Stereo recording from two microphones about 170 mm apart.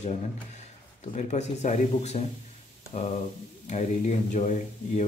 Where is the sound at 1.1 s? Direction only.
45° left (ahead or behind).